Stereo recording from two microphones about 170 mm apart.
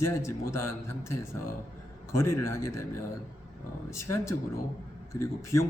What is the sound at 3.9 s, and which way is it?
A man's voice, 15° left (ahead or behind).